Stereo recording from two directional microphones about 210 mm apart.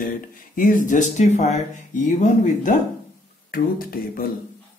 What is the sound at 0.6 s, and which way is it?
A man's voice, 40° left (ahead or behind).